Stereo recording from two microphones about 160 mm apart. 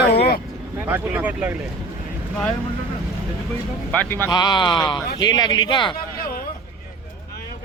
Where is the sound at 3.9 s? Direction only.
10° left (ahead or behind).